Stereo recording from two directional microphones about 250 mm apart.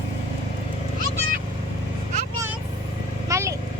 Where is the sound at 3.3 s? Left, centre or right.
Centre.